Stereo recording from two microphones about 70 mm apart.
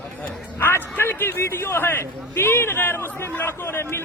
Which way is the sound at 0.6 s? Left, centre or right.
Left.